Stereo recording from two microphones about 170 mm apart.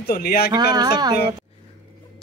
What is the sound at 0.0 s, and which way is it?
Speech, 65° left (ahead or behind).